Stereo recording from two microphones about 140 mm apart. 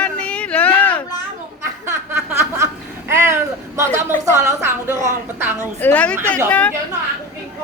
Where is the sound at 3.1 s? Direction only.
20° right (ahead or behind).